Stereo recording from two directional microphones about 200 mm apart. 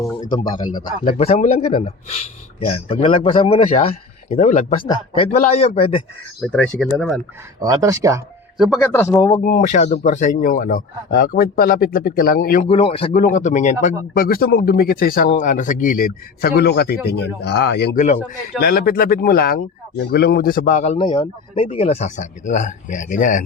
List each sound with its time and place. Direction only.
1.0 s a man's voice: 30° left (ahead or behind)
6.4 s speech: 5° left (ahead or behind)
7.6 s speech: 15° right (ahead or behind)
8.5 s speech: 5° right (ahead or behind)
8.8 s speech: 15° left (ahead or behind)
9.3 s speech: 40° left (ahead or behind)
12.6 s speech: 30° left (ahead or behind)
13.2 s a man's voice: 40° left (ahead or behind); by 17.9 s 55° left (ahead or behind)
17.9 s a man's voice: 40° left (ahead or behind)